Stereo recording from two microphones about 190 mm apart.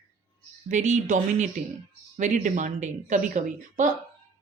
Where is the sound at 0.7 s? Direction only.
40° right (ahead or behind).